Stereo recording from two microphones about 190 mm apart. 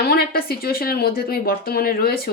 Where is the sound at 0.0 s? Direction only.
55° left (ahead or behind).